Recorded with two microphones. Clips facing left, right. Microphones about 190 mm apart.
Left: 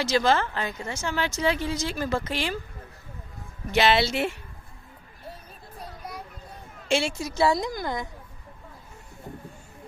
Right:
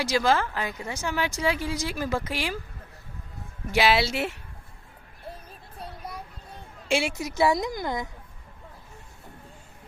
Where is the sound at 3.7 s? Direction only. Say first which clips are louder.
Left 1 dB; 5° right (ahead or behind).